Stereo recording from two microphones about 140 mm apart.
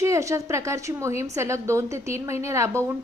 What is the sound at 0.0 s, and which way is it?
A woman's voice, 20° right (ahead or behind).